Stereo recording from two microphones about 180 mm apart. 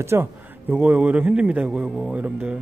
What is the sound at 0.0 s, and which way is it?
A man's voice, 10° right (ahead or behind).